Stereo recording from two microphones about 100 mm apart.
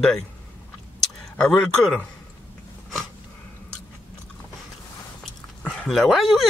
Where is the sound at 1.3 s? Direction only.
10° left (ahead or behind).